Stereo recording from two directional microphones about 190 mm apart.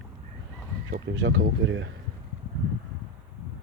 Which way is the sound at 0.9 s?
75° right (ahead or behind).